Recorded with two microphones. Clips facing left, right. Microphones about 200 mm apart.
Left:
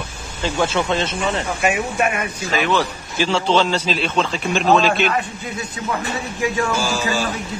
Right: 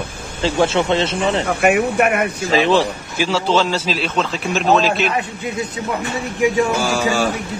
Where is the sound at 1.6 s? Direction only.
60° right (ahead or behind).